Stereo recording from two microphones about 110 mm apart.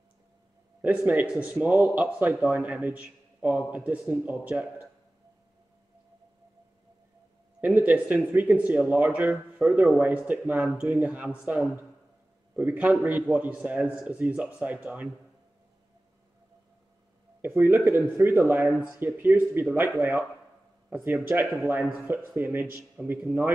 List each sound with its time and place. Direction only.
0.8 s speech: 15° right (ahead or behind)
7.6 s speech: 15° right (ahead or behind)
17.4 s speech: 20° right (ahead or behind)